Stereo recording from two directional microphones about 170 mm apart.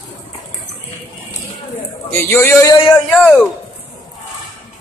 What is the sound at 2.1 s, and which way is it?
Speech, 15° left (ahead or behind).